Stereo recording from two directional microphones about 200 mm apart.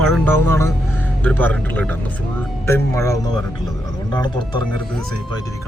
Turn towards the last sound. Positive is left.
turn(degrees=20)  # may be behind; listen again after turning